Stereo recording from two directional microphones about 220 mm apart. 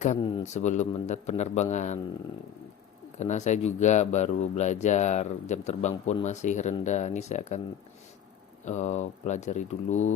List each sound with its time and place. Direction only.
0.2 s speech: 20° left (ahead or behind)
3.2 s speech: 30° left (ahead or behind)
8.6 s speech: 30° left (ahead or behind)